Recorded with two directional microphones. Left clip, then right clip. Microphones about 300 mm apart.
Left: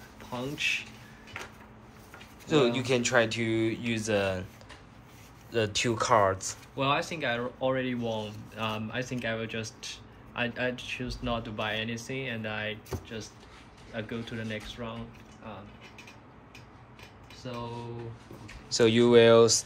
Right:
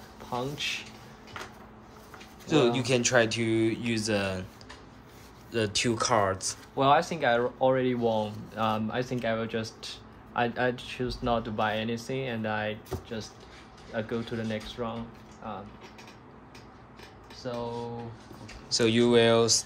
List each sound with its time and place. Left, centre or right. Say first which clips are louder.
0.6 s speech: left 3 dB; centre
2.4 s speech: right 1 dB; centre
5.5 s speech: even; centre
6.8 s speech: right 5 dB; right
18.7 s speech: left 2 dB; centre